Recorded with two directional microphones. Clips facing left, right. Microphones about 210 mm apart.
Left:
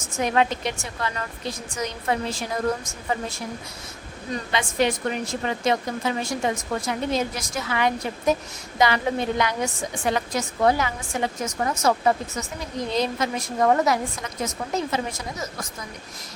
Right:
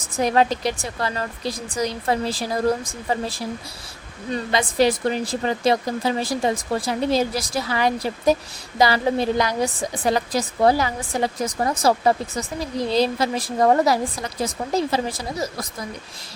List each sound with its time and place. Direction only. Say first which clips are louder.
0.0 s a woman's voice: right 3 dB; 35° right (ahead or behind)